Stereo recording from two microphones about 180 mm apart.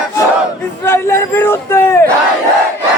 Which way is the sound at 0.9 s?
15° left (ahead or behind).